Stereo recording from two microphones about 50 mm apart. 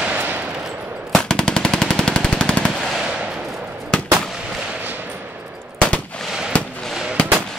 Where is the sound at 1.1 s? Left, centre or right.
Centre.